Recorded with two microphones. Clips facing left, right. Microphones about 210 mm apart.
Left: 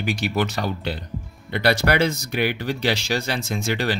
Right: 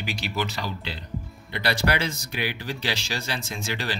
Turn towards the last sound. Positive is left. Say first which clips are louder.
# left 7 dB
turn(degrees=55)  # may be behind; listen again after turning